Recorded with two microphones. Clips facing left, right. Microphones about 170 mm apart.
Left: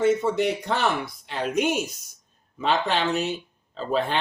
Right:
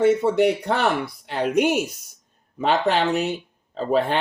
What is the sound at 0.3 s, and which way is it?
Speech, 65° right (ahead or behind).